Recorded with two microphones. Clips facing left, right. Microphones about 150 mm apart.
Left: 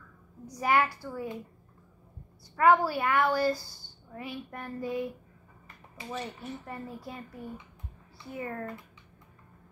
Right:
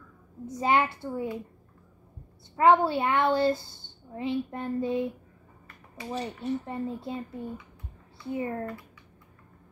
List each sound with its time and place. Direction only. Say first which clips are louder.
0.5 s a woman's voice: right 2 dB; 25° right (ahead or behind)
2.5 s a woman's voice: right 2 dB; 25° right (ahead or behind)